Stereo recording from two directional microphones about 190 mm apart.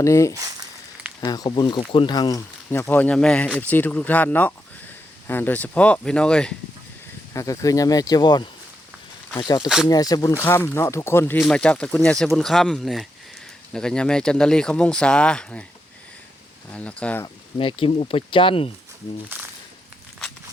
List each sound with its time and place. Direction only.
0.0 s speech: 15° left (ahead or behind)
0.3 s speech: 20° right (ahead or behind)
1.2 s speech: 20° left (ahead or behind); by 6.5 s 5° left (ahead or behind)
7.3 s speech: 15° left (ahead or behind)
16.7 s speech: 5° left (ahead or behind)
17.6 s speech: 30° left (ahead or behind)